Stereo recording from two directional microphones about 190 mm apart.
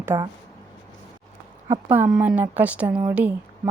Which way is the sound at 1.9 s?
5° right (ahead or behind).